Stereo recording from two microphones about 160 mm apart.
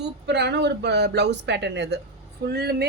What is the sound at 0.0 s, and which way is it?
A woman's voice, 90° right.